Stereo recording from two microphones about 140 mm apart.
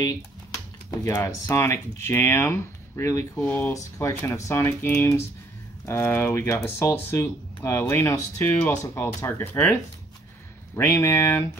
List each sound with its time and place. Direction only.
1.0 s speech: 20° left (ahead or behind)
10.8 s speech: 20° left (ahead or behind)